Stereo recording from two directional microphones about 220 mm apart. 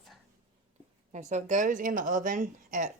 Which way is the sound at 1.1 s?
35° right (ahead or behind).